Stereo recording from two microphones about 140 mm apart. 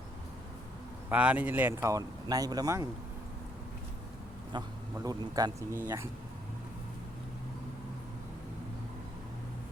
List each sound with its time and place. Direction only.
1.1 s speech: 10° right (ahead or behind); by 2.8 s 25° right (ahead or behind)
4.5 s speech: 35° right (ahead or behind)